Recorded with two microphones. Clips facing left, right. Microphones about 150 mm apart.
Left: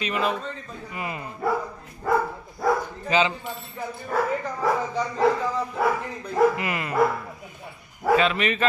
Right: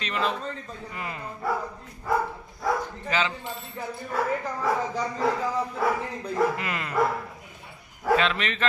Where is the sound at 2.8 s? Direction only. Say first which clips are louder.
Left 5 dB; 20° left (ahead or behind).